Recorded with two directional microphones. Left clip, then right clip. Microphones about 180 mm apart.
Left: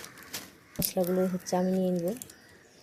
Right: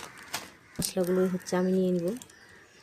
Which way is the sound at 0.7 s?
15° right (ahead or behind).